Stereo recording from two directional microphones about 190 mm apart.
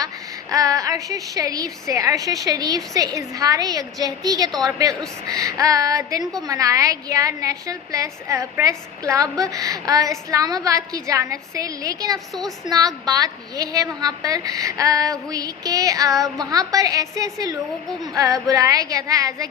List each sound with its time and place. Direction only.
0.5 s a woman's voice: 20° right (ahead or behind)